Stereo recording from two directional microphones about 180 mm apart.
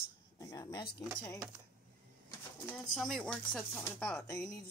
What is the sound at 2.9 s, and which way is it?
Speech, 5° left (ahead or behind).